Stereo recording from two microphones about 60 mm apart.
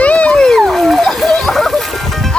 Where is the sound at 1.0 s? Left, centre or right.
Centre.